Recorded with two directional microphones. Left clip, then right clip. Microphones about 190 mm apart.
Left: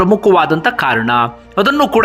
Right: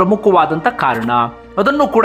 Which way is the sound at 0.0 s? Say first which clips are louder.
Left 1 dB; 10° left (ahead or behind).